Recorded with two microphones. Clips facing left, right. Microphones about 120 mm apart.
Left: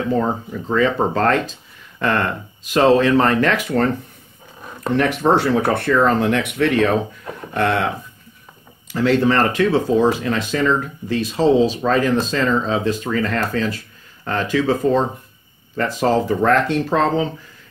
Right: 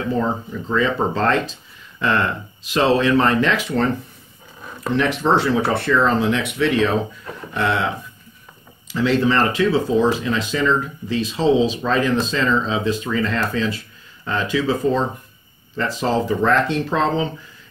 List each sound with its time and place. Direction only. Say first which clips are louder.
0.5 s speech: left 2 dB; 45° left (ahead or behind)
4.8 s speech: left 2 dB; 50° left (ahead or behind)